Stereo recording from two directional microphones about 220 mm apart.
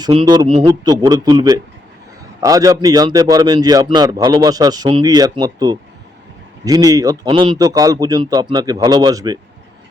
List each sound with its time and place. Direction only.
0.0 s a man's voice: 20° right (ahead or behind)